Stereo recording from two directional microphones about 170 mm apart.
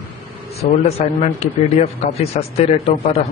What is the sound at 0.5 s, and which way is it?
Speech, 40° left (ahead or behind).